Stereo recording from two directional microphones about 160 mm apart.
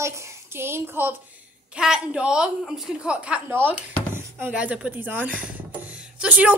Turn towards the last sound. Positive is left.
turn(degrees=-5)  # may be behind; listen again after turning